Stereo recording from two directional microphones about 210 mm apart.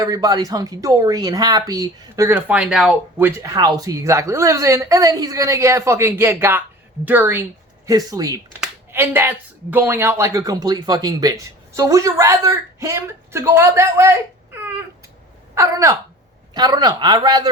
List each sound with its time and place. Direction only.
0.0 s speech: 20° right (ahead or behind)